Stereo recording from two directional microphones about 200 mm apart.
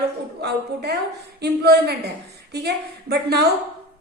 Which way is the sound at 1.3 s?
55° right (ahead or behind).